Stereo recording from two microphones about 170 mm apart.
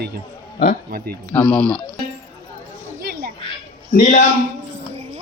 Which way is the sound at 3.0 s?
65° right (ahead or behind).